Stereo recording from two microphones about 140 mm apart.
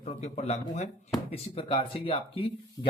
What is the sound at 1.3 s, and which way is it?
Speech, 40° left (ahead or behind).